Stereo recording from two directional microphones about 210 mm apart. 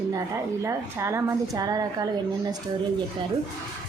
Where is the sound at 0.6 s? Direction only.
15° right (ahead or behind).